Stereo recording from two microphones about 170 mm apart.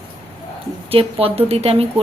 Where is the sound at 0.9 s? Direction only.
35° right (ahead or behind).